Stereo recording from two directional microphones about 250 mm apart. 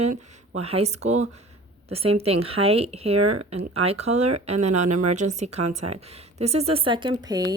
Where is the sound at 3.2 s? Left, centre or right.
Right.